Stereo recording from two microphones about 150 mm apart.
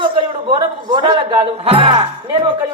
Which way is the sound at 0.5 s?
30° right (ahead or behind).